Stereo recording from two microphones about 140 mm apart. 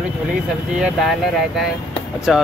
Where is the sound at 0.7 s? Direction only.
5° right (ahead or behind).